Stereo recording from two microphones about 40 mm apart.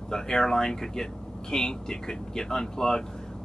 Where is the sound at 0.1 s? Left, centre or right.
Centre.